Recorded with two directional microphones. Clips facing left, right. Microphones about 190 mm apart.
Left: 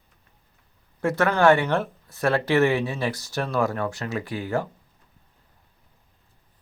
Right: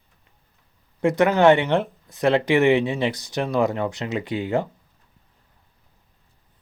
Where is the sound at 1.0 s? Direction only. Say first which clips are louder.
Right 3 dB; 15° right (ahead or behind).